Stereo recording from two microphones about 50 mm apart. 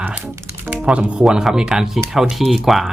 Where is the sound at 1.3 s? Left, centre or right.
Centre.